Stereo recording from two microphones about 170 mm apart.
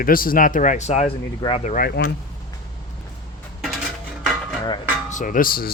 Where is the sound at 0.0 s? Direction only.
55° left (ahead or behind); by 1.7 s 35° left (ahead or behind).